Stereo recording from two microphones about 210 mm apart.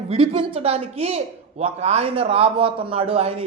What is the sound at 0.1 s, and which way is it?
A man's voice, 30° right (ahead or behind).